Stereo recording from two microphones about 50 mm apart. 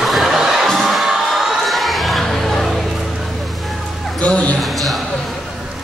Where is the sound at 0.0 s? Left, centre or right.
Centre.